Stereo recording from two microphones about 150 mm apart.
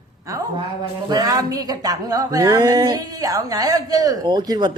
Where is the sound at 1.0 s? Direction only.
25° right (ahead or behind).